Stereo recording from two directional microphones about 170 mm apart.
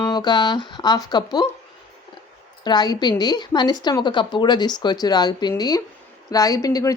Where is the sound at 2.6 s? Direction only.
25° left (ahead or behind).